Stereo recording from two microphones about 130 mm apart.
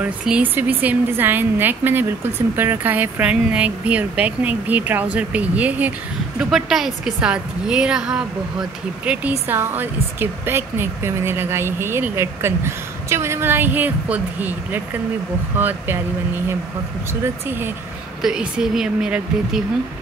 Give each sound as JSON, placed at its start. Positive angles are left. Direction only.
{"t": 0.0, "sound": "a woman's voice", "side_deg": -10}
{"t": 18.2, "sound": "speech", "side_deg": -5}